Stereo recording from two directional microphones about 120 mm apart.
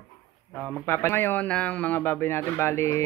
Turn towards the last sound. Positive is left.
turn(degrees=25)  # may be behind; listen again after turning